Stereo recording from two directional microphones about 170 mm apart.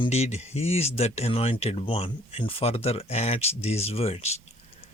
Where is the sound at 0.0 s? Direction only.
40° left (ahead or behind).